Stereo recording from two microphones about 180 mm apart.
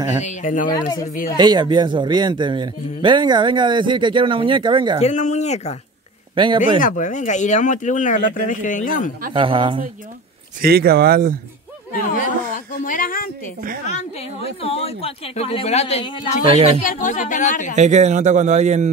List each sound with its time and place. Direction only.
0.2 s speech: 40° left (ahead or behind)
1.3 s speech: 25° right (ahead or behind)
5.0 s speech: 40° left (ahead or behind)
6.3 s speech: 25° right (ahead or behind)
6.8 s speech: 45° left (ahead or behind)
9.3 s speech: 25° right (ahead or behind)
10.6 s speech: 60° right (ahead or behind)
12.1 s speech: 50° left (ahead or behind)
13.8 s speech: 35° left (ahead or behind)
16.8 s speech: 45° left (ahead or behind)
17.7 s a man's voice: 40° right (ahead or behind)